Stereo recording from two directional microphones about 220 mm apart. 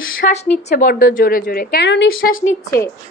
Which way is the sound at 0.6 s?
35° left (ahead or behind).